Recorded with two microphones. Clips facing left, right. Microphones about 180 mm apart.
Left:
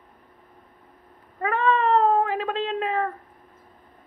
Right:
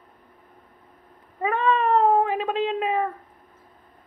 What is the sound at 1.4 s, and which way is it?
Cat, 20° right (ahead or behind).